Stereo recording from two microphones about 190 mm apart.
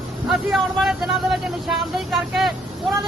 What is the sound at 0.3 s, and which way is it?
Speech, centre (ahead or behind).